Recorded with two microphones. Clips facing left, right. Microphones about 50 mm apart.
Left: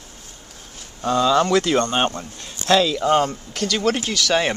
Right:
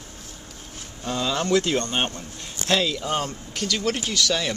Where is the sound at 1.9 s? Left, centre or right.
Left.